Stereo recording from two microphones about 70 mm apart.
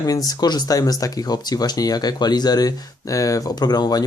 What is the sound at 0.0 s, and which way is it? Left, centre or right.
Speech, left.